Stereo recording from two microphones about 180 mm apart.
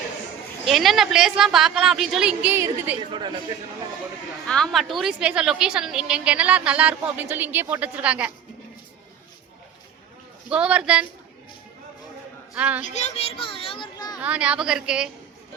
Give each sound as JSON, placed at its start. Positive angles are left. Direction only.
{"t": 0.6, "sound": "a woman's voice", "side_deg": 0}
{"t": 3.1, "sound": "a man's voice", "side_deg": -25}
{"t": 4.4, "sound": "a woman's voice", "side_deg": 5}
{"t": 10.5, "sound": "a woman's voice", "side_deg": -5}
{"t": 12.5, "sound": "a woman's voice", "side_deg": -5}
{"t": 12.8, "sound": "a child's voice", "side_deg": 40}
{"t": 14.2, "sound": "a woman's voice", "side_deg": -5}